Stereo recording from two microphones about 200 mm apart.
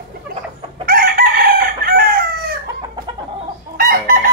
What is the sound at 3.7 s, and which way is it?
Chicken, 45° right (ahead or behind).